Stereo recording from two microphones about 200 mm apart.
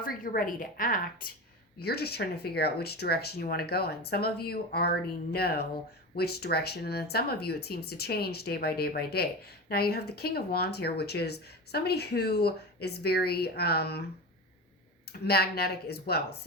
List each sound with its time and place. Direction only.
0.0 s speech: 45° left (ahead or behind)
15.3 s speech: 50° left (ahead or behind)